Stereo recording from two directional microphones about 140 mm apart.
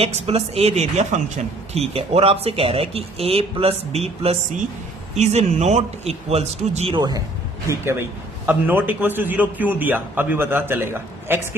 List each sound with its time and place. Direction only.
0.0 s speech: 45° right (ahead or behind)
7.7 s a man's voice: 20° right (ahead or behind)